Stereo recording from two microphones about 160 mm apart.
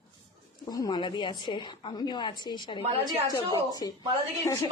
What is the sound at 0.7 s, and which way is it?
A woman's voice, 25° left (ahead or behind).